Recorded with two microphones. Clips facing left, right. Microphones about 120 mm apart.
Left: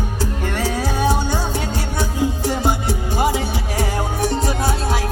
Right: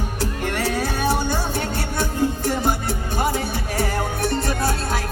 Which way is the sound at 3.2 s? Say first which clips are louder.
Left 3 dB; 15° left (ahead or behind).